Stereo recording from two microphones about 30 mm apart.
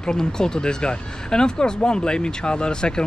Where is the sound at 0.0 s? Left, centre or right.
Left.